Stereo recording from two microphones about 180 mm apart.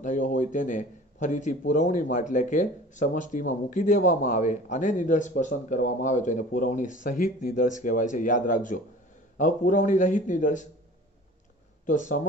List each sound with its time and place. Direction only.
0.0 s a man's voice: 45° left (ahead or behind)
11.8 s speech: 45° left (ahead or behind)